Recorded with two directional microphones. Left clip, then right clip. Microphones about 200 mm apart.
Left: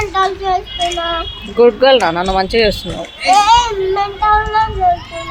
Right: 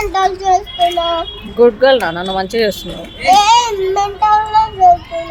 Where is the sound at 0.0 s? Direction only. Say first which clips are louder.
Right 1 dB; 20° right (ahead or behind).